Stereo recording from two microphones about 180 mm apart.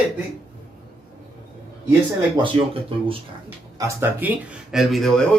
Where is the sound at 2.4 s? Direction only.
30° right (ahead or behind).